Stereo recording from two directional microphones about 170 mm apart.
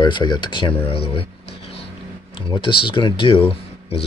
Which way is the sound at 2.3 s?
30° left (ahead or behind).